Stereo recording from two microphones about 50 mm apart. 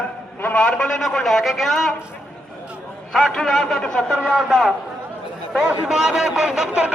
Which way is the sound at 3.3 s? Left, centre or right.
Centre.